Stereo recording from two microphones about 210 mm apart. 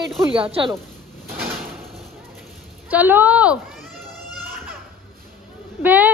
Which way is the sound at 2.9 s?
10° right (ahead or behind).